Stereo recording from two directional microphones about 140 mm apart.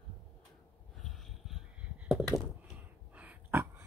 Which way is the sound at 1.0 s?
Centre (ahead or behind).